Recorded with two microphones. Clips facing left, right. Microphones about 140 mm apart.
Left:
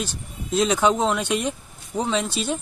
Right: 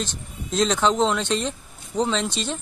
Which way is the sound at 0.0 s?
10° left (ahead or behind).